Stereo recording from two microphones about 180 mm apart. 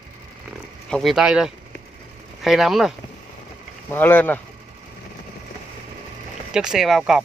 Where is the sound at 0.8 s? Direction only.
Centre (ahead or behind).